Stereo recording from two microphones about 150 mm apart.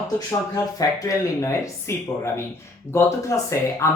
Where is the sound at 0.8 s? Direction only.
20° left (ahead or behind).